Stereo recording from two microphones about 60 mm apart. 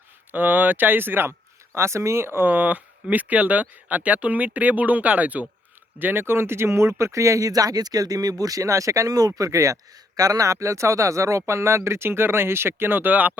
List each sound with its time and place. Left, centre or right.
0.3 s speech: right
2.5 s speech: right
10.2 s speech: right